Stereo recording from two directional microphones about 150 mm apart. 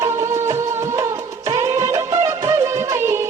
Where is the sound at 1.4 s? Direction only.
20° right (ahead or behind).